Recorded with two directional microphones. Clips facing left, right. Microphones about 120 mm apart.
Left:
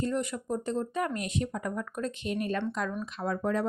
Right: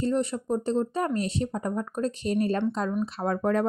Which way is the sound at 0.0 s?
30° right (ahead or behind).